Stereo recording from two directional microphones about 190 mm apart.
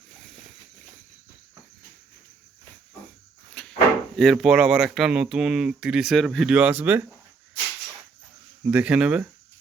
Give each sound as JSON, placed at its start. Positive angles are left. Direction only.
{"t": 3.5, "sound": "a sound", "side_deg": 5}
{"t": 4.2, "sound": "speech", "side_deg": 0}
{"t": 8.7, "sound": "speech", "side_deg": -5}